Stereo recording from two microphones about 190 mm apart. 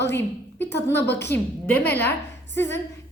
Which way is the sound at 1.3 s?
10° left (ahead or behind).